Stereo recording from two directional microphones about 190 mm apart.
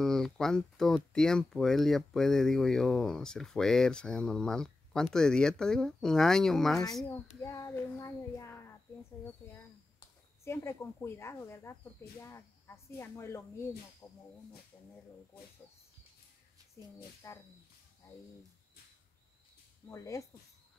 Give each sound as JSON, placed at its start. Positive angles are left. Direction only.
{"t": 0.0, "sound": "speech", "side_deg": 0}
{"t": 7.4, "sound": "speech", "side_deg": 15}
{"t": 16.8, "sound": "speech", "side_deg": 15}
{"t": 19.9, "sound": "speech", "side_deg": 15}